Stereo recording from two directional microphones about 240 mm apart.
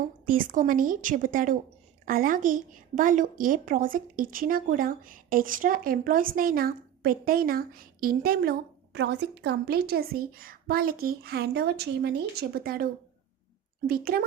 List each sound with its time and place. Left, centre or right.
0.3 s a woman's voice: right